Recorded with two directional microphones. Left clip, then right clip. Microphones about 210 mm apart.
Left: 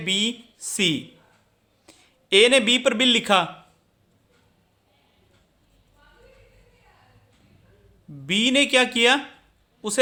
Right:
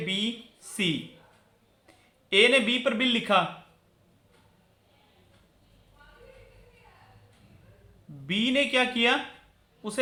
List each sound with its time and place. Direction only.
0.0 s a man's voice: 55° left (ahead or behind)
8.3 s a woman's voice: 55° left (ahead or behind)